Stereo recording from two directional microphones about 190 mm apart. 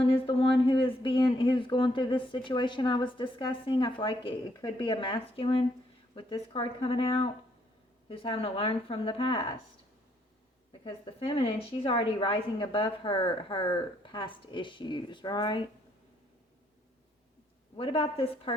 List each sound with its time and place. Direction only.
0.0 s speech: 30° left (ahead or behind)
10.7 s speech: 25° left (ahead or behind)
17.7 s speech: 25° left (ahead or behind)